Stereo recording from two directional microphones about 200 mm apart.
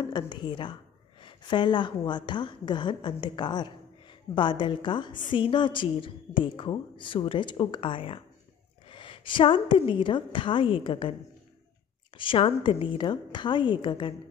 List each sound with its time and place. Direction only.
0.0 s a woman's voice: 20° left (ahead or behind)
12.2 s a woman's voice: 25° left (ahead or behind)